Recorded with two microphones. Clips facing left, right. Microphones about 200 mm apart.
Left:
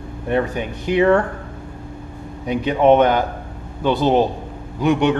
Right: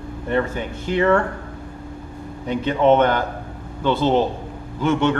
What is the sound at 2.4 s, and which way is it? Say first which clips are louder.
Speech: left 2 dB; 15° left (ahead or behind).